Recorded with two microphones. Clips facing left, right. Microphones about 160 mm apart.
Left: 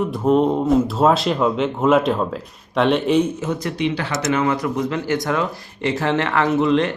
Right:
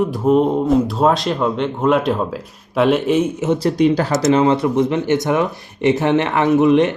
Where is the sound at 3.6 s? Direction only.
40° right (ahead or behind).